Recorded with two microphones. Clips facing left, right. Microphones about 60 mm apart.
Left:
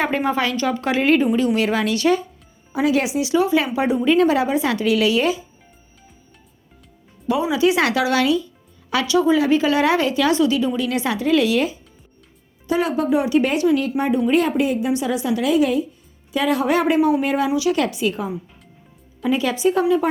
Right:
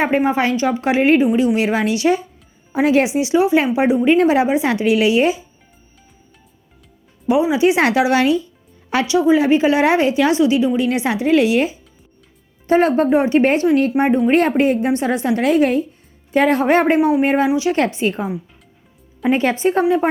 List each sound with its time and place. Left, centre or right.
0.3 s speech: right
1.3 s a woman's voice: centre
1.5 s speech: right
2.7 s speech: right
7.5 s speech: right
12.6 s speech: right
14.3 s a woman's voice: right
19.3 s speech: right